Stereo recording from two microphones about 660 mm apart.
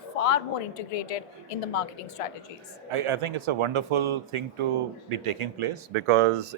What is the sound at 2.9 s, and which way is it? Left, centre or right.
Speech, right.